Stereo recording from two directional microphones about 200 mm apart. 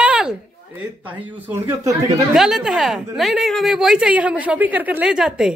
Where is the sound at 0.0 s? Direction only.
5° right (ahead or behind).